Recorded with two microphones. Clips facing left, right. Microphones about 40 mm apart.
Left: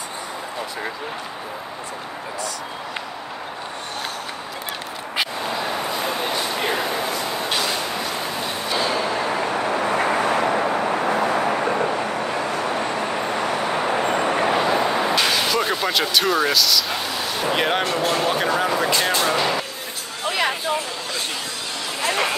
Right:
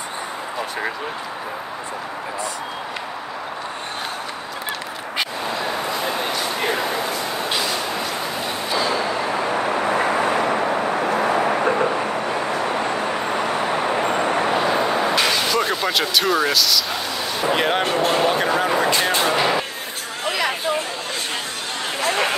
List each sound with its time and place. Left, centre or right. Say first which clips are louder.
5.1 s a sound: even; centre
8.7 s vehicle: right 1 dB; left
9.3 s vehicle: right 1 dB; centre
11.7 s a sound: right 2 dB; centre
12.7 s vehicle: right 1 dB; right
13.0 s vehicle: right 1 dB; centre
17.8 s speech: right 2 dB; centre
18.3 s speech: right 1 dB; centre
19.2 s speech: right 2 dB; centre
20.2 s a sound: even; left
22.0 s chatter: right 1 dB; right